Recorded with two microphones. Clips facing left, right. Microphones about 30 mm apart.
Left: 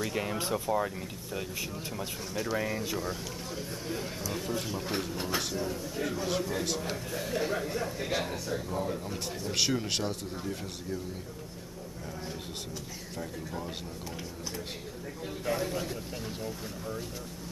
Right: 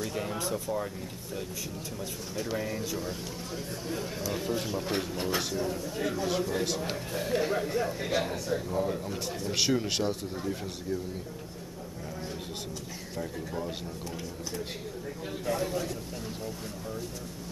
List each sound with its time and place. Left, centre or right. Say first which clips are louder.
0.0 s speech: left 1 dB; centre
2.5 s speech: left 1 dB; centre
13.2 s speech: right 3 dB; centre
15.6 s speech: right 2 dB; centre